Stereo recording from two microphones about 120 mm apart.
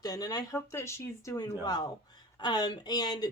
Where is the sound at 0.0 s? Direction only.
30° left (ahead or behind).